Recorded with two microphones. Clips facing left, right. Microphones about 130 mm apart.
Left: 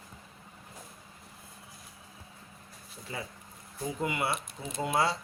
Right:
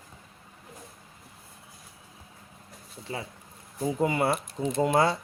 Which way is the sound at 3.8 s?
35° right (ahead or behind).